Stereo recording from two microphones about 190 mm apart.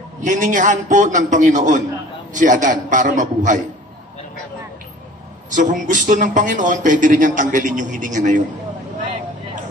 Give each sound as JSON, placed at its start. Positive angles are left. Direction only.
{"t": 0.2, "sound": "a man's voice", "side_deg": -40}
{"t": 5.5, "sound": "a man's voice", "side_deg": -40}